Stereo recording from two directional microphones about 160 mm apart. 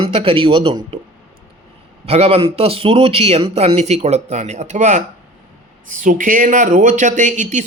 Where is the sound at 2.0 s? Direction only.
40° right (ahead or behind).